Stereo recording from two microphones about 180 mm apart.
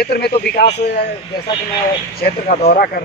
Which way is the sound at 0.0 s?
60° left (ahead or behind).